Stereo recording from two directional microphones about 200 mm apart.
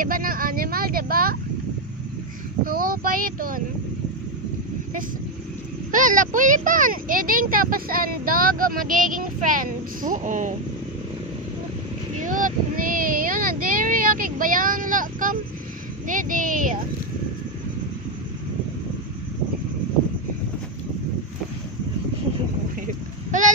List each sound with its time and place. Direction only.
0.0 s vehicle: 45° right (ahead or behind)
2.6 s speech: 45° right (ahead or behind)
5.9 s speech: 40° right (ahead or behind)
12.2 s a sound: 40° right (ahead or behind)
16.1 s speech: 40° right (ahead or behind)